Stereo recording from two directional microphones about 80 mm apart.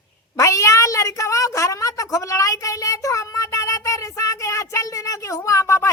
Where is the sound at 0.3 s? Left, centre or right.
Left.